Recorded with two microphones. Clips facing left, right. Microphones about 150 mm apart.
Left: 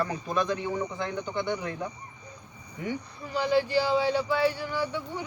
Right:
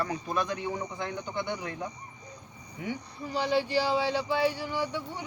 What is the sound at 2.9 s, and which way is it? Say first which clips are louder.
Speech: left 1 dB; 20° right (ahead or behind).